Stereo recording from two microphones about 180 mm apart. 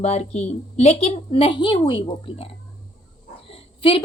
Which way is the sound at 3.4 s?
30° left (ahead or behind).